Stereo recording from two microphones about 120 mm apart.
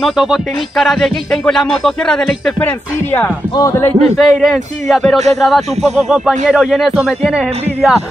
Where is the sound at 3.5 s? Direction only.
25° left (ahead or behind).